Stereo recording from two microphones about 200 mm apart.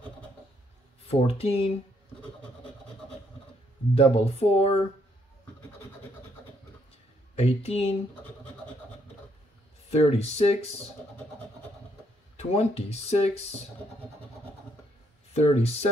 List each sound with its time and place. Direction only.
1.0 s speech: 30° left (ahead or behind)
3.9 s speech: 30° left (ahead or behind)
7.3 s speech: 30° left (ahead or behind)
9.8 s speech: 30° left (ahead or behind)
12.4 s speech: 30° left (ahead or behind)
15.3 s speech: 30° left (ahead or behind)